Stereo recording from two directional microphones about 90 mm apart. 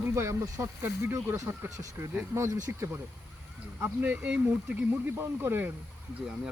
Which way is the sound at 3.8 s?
15° right (ahead or behind).